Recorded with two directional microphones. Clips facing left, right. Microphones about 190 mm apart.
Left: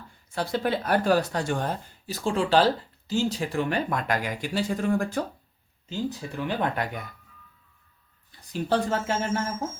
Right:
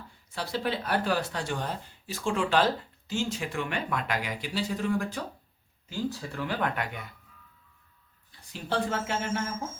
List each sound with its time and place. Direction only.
0.3 s speech: 50° left (ahead or behind)
5.9 s speech: 20° left (ahead or behind); by 7.0 s 35° left (ahead or behind)
8.9 s music: 40° left (ahead or behind)